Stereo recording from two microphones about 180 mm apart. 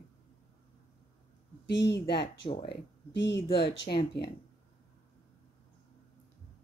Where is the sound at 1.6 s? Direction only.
70° left (ahead or behind).